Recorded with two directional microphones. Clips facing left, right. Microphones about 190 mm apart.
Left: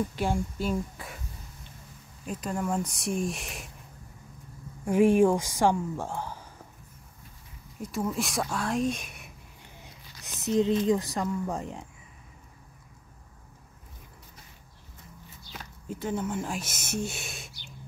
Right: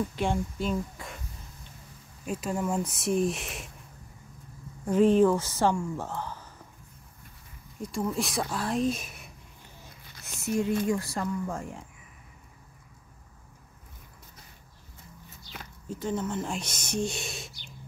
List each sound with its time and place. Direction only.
0.2 s speech: 5° left (ahead or behind)
2.2 s speech: 5° right (ahead or behind)
4.8 s a woman's voice: 10° left (ahead or behind)
7.8 s speech: centre (ahead or behind)
9.8 s a sound: 20° left (ahead or behind)
10.9 s speech: 20° left (ahead or behind)
16.1 s speech: 10° left (ahead or behind)